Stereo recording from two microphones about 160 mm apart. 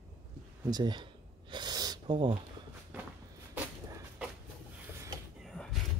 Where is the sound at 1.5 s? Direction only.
25° right (ahead or behind).